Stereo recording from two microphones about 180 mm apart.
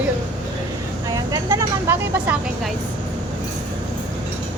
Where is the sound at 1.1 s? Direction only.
20° right (ahead or behind).